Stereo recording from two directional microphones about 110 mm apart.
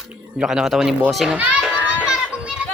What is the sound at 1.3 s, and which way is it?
Children playing, 10° right (ahead or behind).